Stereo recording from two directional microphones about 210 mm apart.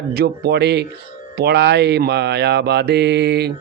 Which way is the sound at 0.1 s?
50° right (ahead or behind).